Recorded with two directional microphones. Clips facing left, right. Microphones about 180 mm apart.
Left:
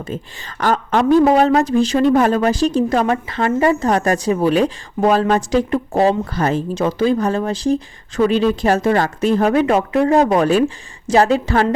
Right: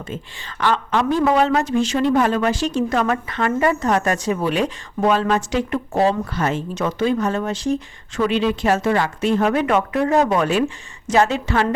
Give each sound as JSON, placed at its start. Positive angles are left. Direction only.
{"t": 0.0, "sound": "speech", "side_deg": 40}